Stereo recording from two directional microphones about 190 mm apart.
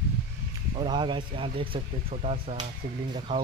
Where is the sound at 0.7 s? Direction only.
25° right (ahead or behind).